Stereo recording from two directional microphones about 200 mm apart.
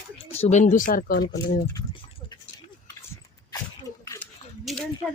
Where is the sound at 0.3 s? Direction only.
35° left (ahead or behind); by 1.6 s 50° left (ahead or behind).